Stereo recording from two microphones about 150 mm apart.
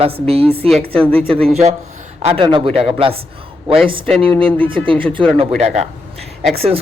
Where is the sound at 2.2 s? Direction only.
35° right (ahead or behind).